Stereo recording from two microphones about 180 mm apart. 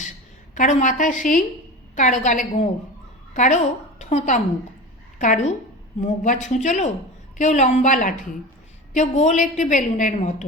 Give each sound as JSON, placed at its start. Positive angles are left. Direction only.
{"t": 0.5, "sound": "a woman's voice", "side_deg": 40}